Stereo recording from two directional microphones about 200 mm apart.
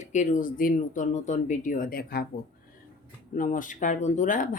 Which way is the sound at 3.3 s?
40° left (ahead or behind).